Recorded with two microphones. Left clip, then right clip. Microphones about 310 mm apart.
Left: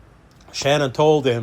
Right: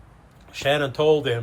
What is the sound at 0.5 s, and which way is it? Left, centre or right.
Speech, centre.